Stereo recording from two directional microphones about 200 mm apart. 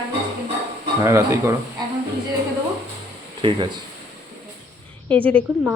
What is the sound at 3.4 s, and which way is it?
Speech, 25° right (ahead or behind).